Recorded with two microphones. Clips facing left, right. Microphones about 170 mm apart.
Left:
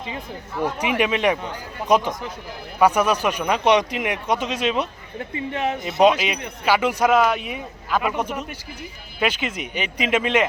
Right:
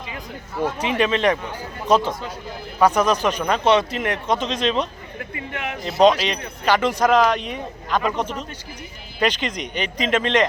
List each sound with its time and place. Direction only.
0.6 s speech: 10° left (ahead or behind)
5.3 s speech: 25° left (ahead or behind)
5.8 s speech: 10° left (ahead or behind)